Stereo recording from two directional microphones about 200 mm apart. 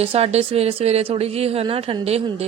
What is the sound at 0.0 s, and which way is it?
Speech, 30° right (ahead or behind).